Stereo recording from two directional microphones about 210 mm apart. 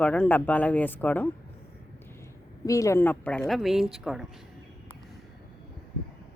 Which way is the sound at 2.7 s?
15° left (ahead or behind).